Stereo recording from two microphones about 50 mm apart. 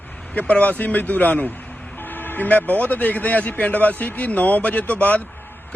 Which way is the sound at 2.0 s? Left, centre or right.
Left.